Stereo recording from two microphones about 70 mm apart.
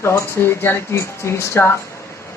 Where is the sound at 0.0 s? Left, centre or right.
Left.